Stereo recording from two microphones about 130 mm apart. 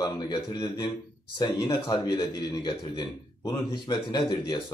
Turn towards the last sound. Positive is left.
turn(degrees=35)  # may be behind; listen again after turning